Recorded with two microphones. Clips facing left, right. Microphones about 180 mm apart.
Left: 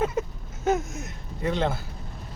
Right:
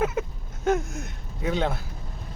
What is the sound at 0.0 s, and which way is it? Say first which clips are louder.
Speech: even; centre (ahead or behind).